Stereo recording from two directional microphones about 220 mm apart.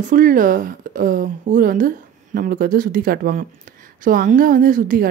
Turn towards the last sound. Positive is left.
turn(degrees=-40)  # may be behind; listen again after turning